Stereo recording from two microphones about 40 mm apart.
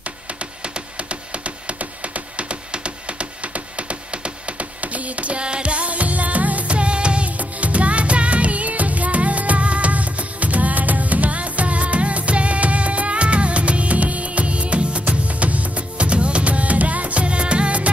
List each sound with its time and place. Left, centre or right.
0.7 s music: right